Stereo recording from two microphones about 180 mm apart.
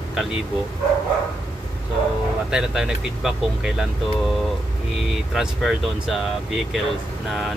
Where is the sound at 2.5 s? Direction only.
5° right (ahead or behind).